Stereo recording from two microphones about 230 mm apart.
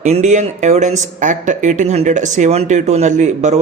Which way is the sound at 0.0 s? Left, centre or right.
Right.